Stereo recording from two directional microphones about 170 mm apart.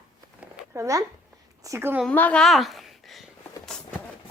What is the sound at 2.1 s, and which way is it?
A woman's voice, 10° left (ahead or behind).